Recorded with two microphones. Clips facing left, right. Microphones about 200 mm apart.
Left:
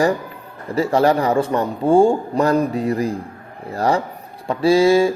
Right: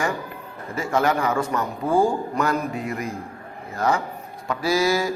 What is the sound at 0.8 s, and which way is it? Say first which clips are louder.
A man's voice: left 6 dB; 35° left (ahead or behind).